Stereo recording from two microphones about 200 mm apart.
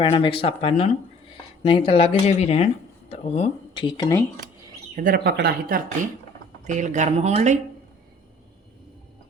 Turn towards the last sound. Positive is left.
turn(degrees=-35)  # may be behind; listen again after turning